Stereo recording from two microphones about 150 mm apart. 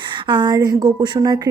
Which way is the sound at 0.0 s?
30° right (ahead or behind).